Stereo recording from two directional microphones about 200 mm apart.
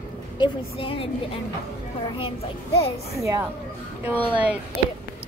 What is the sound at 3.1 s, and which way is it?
Speech, 15° right (ahead or behind).